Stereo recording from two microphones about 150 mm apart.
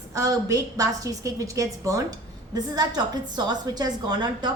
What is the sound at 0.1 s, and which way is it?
A woman's voice, 20° right (ahead or behind).